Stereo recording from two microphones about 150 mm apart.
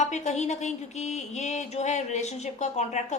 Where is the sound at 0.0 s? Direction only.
50° left (ahead or behind).